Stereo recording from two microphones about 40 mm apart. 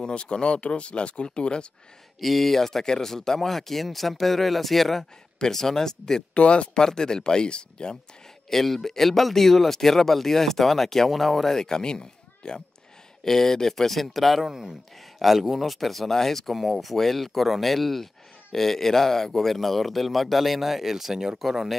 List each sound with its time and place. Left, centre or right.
0.0 s speech: left
2.1 s speech: centre
6.3 s speech: left
8.5 s speech: centre
13.2 s speech: centre
14.5 s speech: centre